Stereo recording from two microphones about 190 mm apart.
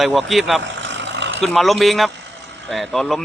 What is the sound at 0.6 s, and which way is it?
Vehicle, 70° right (ahead or behind).